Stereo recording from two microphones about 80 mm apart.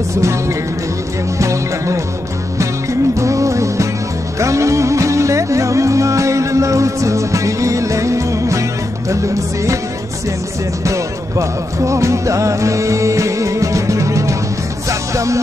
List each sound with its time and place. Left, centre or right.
0.2 s music: right
10.8 s music: right